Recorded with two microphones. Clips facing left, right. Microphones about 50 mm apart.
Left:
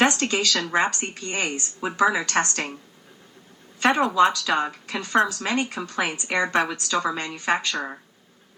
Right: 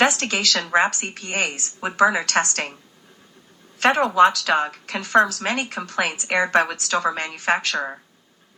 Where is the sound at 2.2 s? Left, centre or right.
Right.